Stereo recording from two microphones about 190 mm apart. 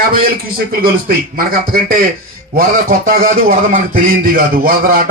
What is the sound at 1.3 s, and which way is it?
Speech, 50° right (ahead or behind).